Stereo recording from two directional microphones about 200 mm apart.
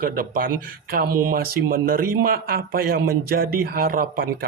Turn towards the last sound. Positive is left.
turn(degrees=-45)  # may be behind; listen again after turning